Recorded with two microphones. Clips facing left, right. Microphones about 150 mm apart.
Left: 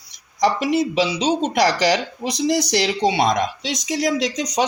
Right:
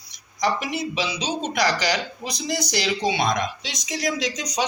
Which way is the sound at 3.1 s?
35° left (ahead or behind).